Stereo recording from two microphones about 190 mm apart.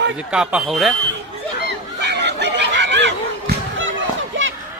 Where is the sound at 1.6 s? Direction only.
65° right (ahead or behind).